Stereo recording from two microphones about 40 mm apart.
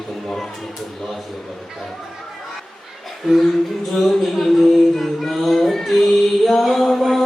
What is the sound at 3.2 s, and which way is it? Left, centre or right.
Speech, centre.